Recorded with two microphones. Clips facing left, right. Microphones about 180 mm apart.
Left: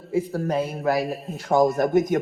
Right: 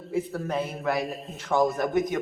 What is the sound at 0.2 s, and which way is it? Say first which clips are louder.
A man's voice: left 5 dB; 35° left (ahead or behind).